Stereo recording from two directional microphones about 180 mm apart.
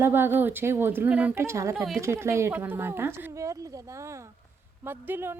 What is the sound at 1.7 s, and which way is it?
Speech, centre (ahead or behind).